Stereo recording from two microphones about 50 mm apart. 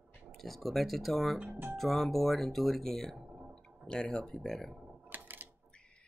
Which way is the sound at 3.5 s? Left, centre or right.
Centre.